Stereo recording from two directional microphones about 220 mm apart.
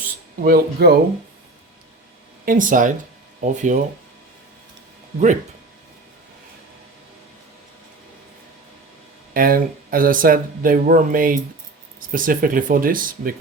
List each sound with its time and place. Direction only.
0.0 s a sound: 40° right (ahead or behind)
2.4 s speech: 40° right (ahead or behind)
9.3 s speech: 40° right (ahead or behind)